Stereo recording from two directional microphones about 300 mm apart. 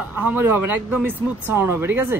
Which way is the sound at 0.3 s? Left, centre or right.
Centre.